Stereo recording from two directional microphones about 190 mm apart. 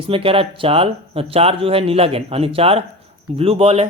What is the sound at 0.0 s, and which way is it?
A man's voice, 30° right (ahead or behind).